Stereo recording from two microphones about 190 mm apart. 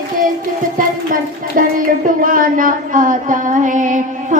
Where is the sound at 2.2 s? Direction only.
45° right (ahead or behind).